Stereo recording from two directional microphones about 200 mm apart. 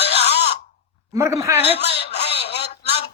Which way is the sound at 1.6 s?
30° left (ahead or behind).